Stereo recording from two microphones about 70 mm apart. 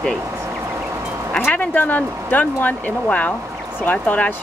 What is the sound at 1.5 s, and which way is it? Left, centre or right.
Speech, left.